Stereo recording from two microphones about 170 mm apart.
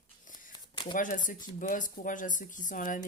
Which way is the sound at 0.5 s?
25° left (ahead or behind).